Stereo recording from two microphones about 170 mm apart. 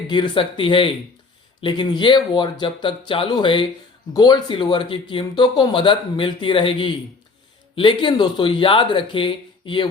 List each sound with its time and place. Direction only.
0.1 s speech: 30° left (ahead or behind)